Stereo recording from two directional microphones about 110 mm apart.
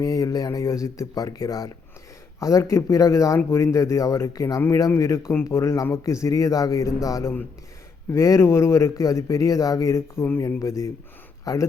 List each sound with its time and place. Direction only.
0.0 s speech: 35° left (ahead or behind)